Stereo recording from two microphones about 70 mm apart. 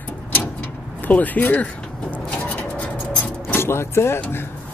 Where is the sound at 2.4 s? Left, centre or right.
Left.